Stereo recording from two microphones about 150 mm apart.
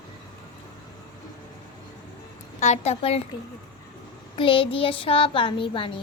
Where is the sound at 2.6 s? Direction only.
45° left (ahead or behind).